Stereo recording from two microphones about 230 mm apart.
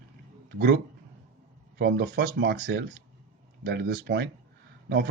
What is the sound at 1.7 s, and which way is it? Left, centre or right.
Speech, right.